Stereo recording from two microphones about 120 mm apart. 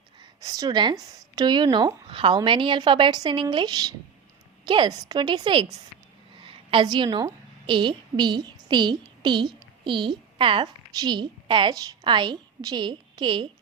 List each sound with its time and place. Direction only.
0.2 s a woman's voice: 30° right (ahead or behind)
6.3 s a sound: 45° right (ahead or behind)
7.7 s a woman's voice: 40° right (ahead or behind)